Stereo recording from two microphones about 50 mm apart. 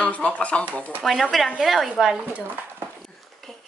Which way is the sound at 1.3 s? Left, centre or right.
Centre.